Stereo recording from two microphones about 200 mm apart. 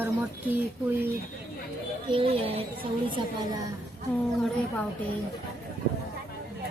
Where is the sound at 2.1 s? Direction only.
30° right (ahead or behind).